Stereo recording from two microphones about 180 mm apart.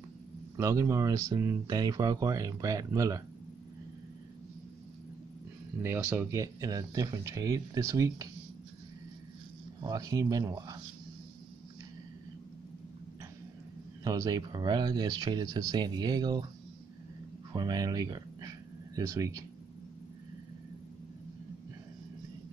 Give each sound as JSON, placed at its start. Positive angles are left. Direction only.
{"t": 0.6, "sound": "speech", "side_deg": -15}
{"t": 5.8, "sound": "speech", "side_deg": -15}
{"t": 9.8, "sound": "speech", "side_deg": -20}
{"t": 14.0, "sound": "speech", "side_deg": -20}
{"t": 17.5, "sound": "speech", "side_deg": -25}